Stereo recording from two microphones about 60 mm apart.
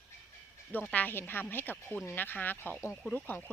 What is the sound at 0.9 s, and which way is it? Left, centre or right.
Speech, left.